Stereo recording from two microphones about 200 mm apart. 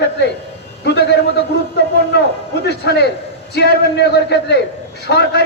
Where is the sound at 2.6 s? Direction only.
55° left (ahead or behind).